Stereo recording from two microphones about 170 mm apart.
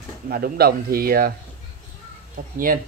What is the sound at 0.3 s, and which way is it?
Speech, 65° right (ahead or behind).